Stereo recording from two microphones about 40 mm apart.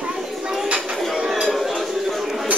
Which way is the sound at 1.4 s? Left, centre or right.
Centre.